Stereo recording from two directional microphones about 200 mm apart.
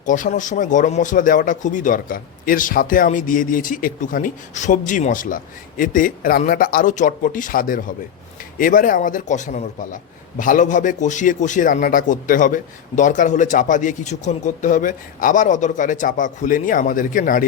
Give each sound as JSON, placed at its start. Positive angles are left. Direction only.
{"t": 0.0, "sound": "speech", "side_deg": 40}